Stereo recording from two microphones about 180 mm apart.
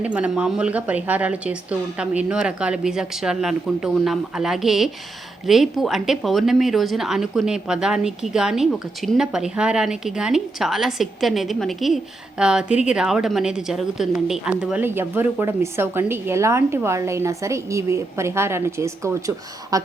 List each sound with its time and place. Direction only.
0.0 s a woman's voice: 5° right (ahead or behind)